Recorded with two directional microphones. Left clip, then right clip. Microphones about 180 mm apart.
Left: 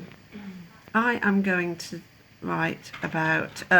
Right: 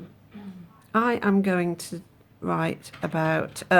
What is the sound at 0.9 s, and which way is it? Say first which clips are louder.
Speech: right 1 dB; 40° right (ahead or behind).